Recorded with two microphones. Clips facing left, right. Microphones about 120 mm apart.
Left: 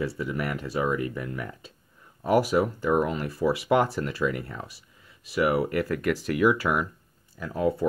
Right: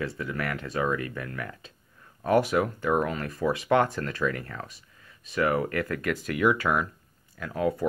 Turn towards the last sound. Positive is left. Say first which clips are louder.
# left 2 dB
turn(degrees=25)  # may be behind; listen again after turning